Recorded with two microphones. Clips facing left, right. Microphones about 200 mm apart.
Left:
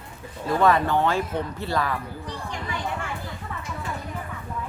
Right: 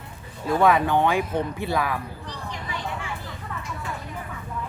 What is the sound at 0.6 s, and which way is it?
Speech, 10° right (ahead or behind).